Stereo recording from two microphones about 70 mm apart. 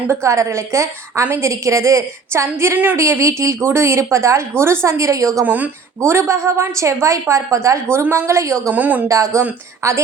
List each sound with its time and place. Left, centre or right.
0.1 s speech: right
5.5 s speech: right
6.0 s speech: right
8.7 s speech: right
9.0 s speech: right